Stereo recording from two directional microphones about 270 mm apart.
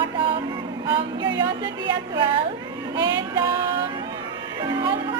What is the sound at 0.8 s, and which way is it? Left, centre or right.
Speech, centre.